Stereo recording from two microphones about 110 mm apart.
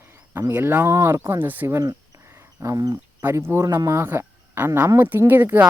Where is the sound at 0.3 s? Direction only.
20° right (ahead or behind).